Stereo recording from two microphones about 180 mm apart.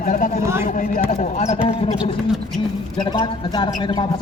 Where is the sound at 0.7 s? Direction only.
45° left (ahead or behind).